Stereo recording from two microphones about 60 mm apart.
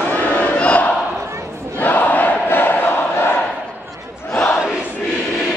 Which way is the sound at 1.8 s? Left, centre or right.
Left.